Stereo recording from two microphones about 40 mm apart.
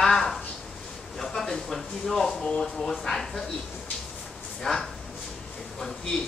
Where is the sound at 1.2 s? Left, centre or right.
Centre.